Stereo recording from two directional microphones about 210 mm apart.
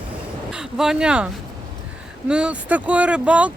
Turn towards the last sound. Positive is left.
turn(degrees=-5)  # may be behind; listen again after turning